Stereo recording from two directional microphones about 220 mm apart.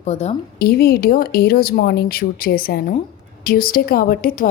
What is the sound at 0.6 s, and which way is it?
A woman's voice, 45° left (ahead or behind).